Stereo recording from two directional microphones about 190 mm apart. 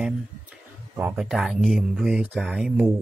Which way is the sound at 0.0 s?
10° right (ahead or behind).